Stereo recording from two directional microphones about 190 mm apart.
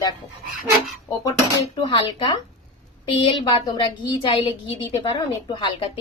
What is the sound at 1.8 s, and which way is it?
Speech, 25° left (ahead or behind).